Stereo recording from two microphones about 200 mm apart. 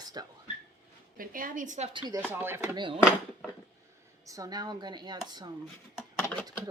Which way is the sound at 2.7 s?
25° right (ahead or behind).